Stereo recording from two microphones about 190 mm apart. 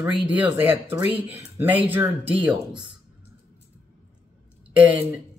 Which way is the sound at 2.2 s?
25° right (ahead or behind).